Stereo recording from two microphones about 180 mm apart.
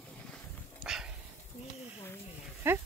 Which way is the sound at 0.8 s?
5° right (ahead or behind).